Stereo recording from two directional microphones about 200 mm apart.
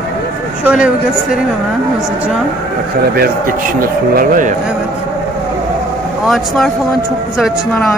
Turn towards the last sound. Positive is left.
turn(degrees=0)  # may be behind; listen again after turning